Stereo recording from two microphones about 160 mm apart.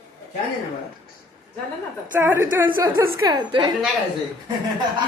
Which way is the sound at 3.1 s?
25° right (ahead or behind).